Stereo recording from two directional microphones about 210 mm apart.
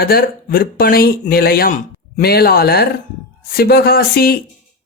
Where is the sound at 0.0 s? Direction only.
45° left (ahead or behind).